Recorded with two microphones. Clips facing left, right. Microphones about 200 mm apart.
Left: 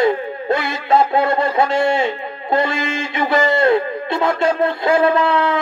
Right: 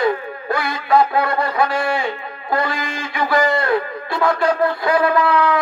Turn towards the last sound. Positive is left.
turn(degrees=25)  # may be behind; listen again after turning